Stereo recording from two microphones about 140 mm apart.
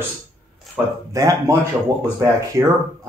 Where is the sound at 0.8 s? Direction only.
10° right (ahead or behind).